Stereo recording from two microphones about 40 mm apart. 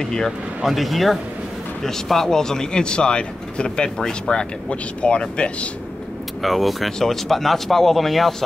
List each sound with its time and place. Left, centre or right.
0.0 s speech: centre
0.7 s speech: centre; by 5.7 s left
6.4 s speech: centre